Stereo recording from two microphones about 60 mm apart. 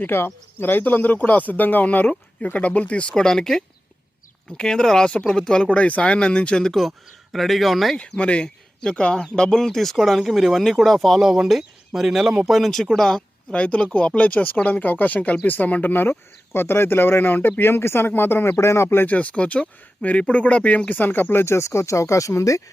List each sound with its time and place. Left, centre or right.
0.0 s speech: left; by 7.9 s centre
7.9 s speech: centre
13.5 s speech: centre; by 19.0 s left
19.0 s speech: left